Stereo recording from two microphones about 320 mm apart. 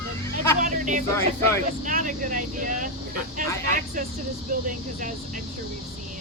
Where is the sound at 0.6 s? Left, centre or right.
Right.